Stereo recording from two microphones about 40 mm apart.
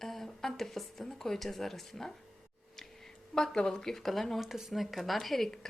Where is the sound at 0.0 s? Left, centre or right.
Centre.